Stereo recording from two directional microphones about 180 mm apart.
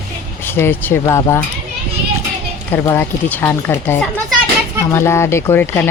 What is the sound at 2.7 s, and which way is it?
Speech, 10° left (ahead or behind).